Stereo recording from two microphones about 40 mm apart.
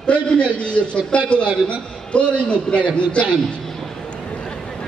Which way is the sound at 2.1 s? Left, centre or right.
Left.